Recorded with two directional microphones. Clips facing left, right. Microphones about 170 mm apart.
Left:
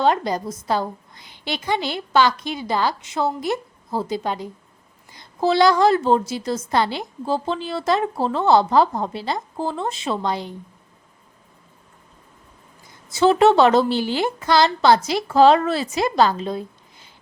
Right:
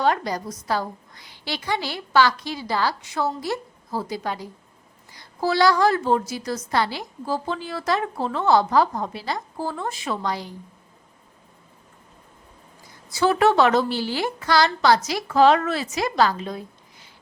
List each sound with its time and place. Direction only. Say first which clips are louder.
0.0 s a woman's voice: left 3 dB; 25° left (ahead or behind)
13.1 s a woman's voice: left 4 dB; 25° left (ahead or behind)